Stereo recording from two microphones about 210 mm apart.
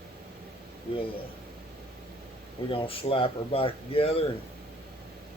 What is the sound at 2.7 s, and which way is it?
Speech, 25° left (ahead or behind).